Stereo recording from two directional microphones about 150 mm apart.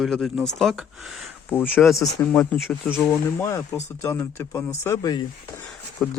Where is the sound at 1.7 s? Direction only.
Centre (ahead or behind).